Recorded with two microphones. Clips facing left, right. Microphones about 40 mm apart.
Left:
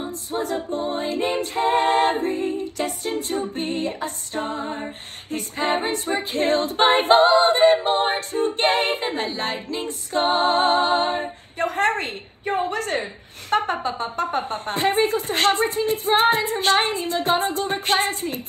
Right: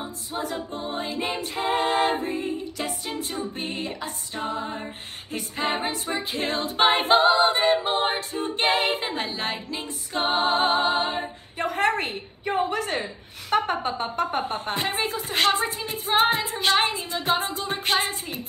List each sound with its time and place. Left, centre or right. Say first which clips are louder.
0.3 s a capella: left 4 dB; left
0.9 s speech: left 3 dB; left
10.6 s music: left 3 dB; right
11.5 s a woman's voice: left 2 dB; left